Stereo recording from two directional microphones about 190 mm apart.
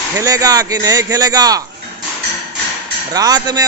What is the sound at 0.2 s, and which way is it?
Speech, 20° right (ahead or behind).